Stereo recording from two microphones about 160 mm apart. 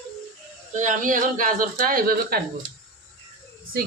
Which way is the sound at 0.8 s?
55° right (ahead or behind).